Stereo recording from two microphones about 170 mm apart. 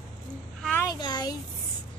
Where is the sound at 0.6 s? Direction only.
10° left (ahead or behind).